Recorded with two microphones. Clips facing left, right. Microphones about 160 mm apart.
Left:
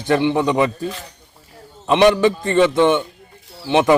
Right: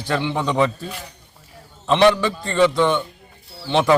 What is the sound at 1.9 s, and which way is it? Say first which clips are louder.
A man's voice: left 2 dB; 15° left (ahead or behind).